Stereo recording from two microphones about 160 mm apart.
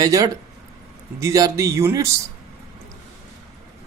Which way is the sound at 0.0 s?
20° right (ahead or behind).